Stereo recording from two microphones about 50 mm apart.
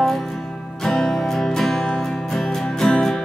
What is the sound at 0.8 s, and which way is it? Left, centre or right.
Music, centre.